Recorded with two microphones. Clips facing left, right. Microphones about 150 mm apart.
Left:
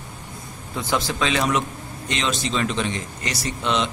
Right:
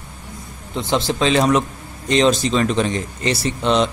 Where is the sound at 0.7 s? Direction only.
25° right (ahead or behind).